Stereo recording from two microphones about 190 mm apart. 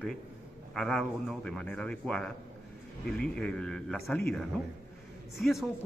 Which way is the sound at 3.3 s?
5° left (ahead or behind).